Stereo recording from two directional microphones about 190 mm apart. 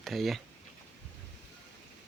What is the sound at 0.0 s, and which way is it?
Speech, centre (ahead or behind).